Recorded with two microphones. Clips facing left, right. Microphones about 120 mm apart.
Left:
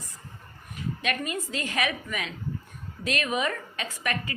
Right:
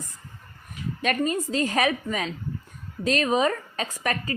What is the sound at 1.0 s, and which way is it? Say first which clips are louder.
A woman's voice: right 7 dB; 35° right (ahead or behind).